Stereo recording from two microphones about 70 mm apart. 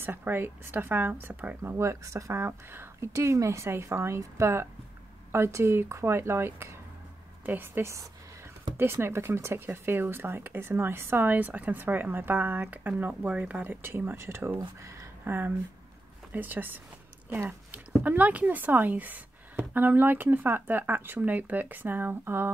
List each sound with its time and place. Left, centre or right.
0.0 s speech: right
1.6 s speech: right
2.4 s speech: right
3.1 s speech: right; by 13.7 s centre
13.7 s speech: right
14.8 s a sound: right
15.2 s speech: right